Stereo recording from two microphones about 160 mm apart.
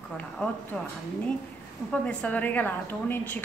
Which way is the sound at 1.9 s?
5° left (ahead or behind).